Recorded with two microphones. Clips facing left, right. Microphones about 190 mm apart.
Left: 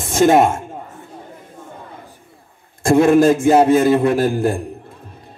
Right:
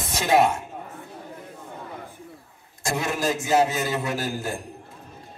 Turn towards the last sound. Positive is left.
turn(degrees=55)  # may be behind; listen again after turning